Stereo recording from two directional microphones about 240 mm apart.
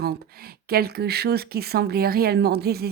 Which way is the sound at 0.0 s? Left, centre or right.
Right.